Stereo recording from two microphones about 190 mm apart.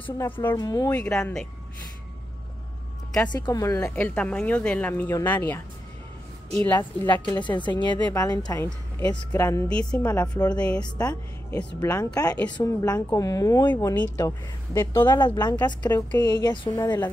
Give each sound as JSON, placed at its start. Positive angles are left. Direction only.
{"t": 0.0, "sound": "speech", "side_deg": 10}
{"t": 1.0, "sound": "speech", "side_deg": 5}
{"t": 3.1, "sound": "speech", "side_deg": 20}
{"t": 6.7, "sound": "a woman's voice", "side_deg": 25}
{"t": 11.9, "sound": "a woman's voice", "side_deg": 20}